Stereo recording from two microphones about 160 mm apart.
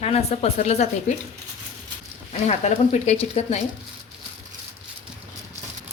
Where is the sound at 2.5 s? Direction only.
45° left (ahead or behind).